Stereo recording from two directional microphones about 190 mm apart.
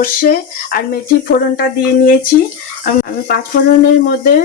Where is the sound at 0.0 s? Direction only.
45° left (ahead or behind).